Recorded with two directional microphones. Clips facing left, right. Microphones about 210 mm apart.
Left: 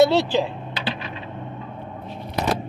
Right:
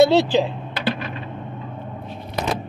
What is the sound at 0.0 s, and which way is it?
Speech, 30° right (ahead or behind).